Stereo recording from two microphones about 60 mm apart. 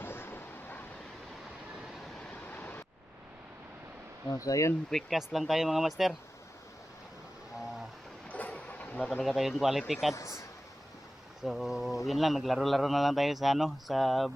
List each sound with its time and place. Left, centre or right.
0.0 s a sound: left
2.3 s a sound: left
4.3 s speech: left
4.9 s a man's voice: centre
8.3 s vehicle: left
9.2 s a man's voice: centre
10.2 s speech: left
11.4 s a man's voice: centre